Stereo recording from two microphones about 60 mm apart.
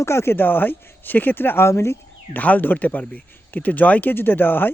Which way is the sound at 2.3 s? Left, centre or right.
Left.